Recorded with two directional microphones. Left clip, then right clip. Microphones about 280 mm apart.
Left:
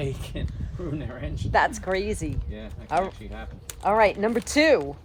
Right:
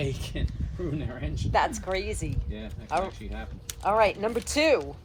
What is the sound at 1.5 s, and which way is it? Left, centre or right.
Speech, left.